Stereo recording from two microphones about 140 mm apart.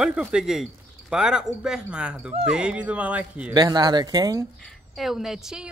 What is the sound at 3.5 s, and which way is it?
Speech, 30° right (ahead or behind).